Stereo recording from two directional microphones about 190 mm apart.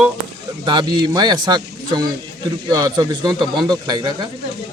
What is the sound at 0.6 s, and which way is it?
Speech, 25° right (ahead or behind).